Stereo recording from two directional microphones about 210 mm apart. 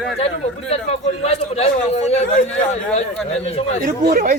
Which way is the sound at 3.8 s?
45° right (ahead or behind).